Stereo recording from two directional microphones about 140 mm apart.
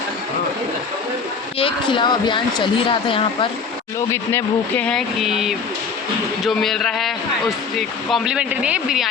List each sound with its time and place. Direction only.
1.5 s speech: 40° left (ahead or behind)
4.1 s speech: 15° left (ahead or behind)
4.9 s speech: centre (ahead or behind)